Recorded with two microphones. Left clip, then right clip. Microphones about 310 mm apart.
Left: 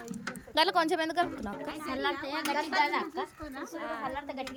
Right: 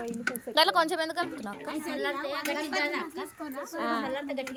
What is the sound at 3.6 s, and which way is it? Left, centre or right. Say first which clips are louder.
Speech: right 6 dB; right.